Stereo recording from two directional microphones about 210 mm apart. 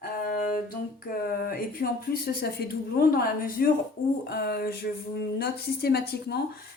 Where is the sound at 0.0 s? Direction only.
45° left (ahead or behind).